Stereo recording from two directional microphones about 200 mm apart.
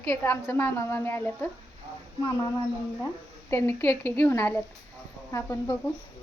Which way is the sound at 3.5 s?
10° left (ahead or behind).